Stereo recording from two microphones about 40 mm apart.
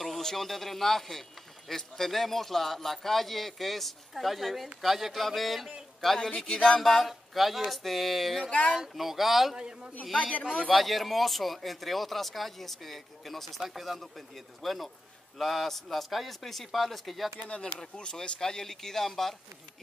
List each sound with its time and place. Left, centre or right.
0.0 s a man's voice: centre
5.9 s speech: centre
6.8 s speech: centre
8.5 s speech: left
8.9 s speech: centre
9.6 s a man's voice: centre
10.7 s speech: centre
17.9 s speech: left; by 19.3 s centre